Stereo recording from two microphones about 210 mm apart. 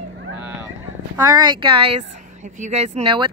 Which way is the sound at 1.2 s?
20° right (ahead or behind).